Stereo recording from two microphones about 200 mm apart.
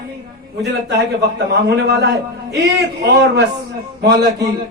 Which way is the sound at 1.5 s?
55° right (ahead or behind).